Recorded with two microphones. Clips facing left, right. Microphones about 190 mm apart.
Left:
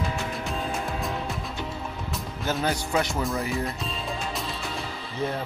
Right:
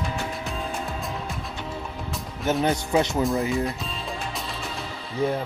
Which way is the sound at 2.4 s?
20° right (ahead or behind).